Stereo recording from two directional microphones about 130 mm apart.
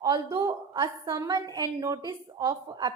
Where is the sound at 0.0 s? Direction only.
25° right (ahead or behind).